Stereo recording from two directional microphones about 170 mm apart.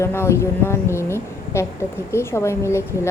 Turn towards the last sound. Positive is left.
turn(degrees=15)  # may be behind; listen again after turning